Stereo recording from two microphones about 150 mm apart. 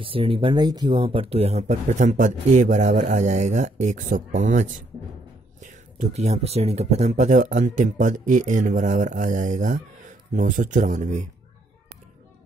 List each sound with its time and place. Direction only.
0.0 s a man's voice: 35° right (ahead or behind); by 11.2 s 55° right (ahead or behind)